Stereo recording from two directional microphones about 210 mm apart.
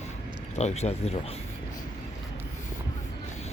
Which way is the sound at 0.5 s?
30° left (ahead or behind).